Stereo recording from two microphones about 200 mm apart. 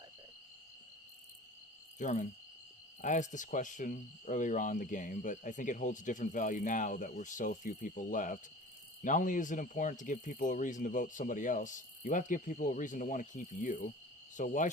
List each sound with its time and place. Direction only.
2.0 s speech: 40° left (ahead or behind)